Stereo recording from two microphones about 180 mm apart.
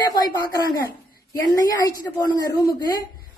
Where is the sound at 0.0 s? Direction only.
20° left (ahead or behind).